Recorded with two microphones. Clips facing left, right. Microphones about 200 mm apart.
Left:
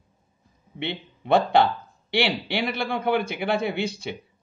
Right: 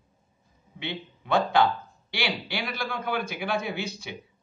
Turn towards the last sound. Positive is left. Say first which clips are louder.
# left 5 dB
turn(degrees=60)  # may be behind; listen again after turning